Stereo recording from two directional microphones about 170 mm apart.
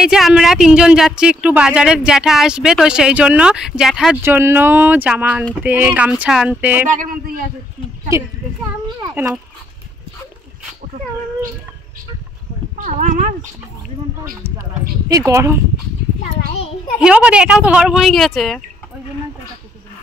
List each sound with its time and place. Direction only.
0.0 s speech: 5° right (ahead or behind)
4.2 s speech: 15° right (ahead or behind)
9.0 s speech: 15° right (ahead or behind)
12.7 s speech: 45° right (ahead or behind)
15.0 s speech: 20° right (ahead or behind)
17.0 s speech: 5° right (ahead or behind)